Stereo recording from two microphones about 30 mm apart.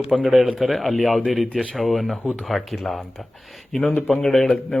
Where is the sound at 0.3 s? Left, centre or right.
Centre.